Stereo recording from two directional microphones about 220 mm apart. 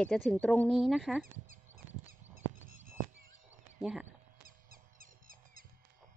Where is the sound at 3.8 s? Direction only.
5° right (ahead or behind).